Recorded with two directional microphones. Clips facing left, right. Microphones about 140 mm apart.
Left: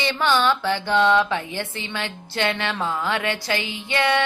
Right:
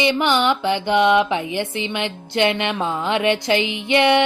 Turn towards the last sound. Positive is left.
turn(degrees=-20)  # may be behind; listen again after turning